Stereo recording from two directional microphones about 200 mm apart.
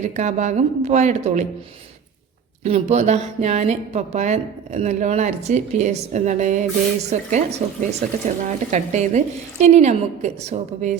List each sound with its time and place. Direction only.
0.0 s speech: 35° right (ahead or behind)
2.6 s speech: 35° right (ahead or behind)